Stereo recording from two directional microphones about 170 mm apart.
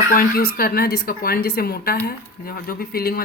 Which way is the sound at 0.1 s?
60° left (ahead or behind).